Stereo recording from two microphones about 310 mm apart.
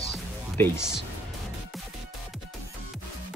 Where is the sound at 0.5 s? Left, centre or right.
Centre.